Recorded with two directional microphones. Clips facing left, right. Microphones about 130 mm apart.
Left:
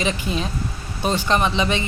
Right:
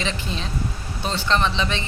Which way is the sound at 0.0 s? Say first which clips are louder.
Left 5 dB; 10° left (ahead or behind).